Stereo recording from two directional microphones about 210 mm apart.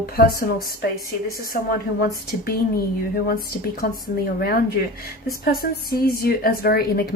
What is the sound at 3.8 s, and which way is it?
A woman's voice, 45° left (ahead or behind).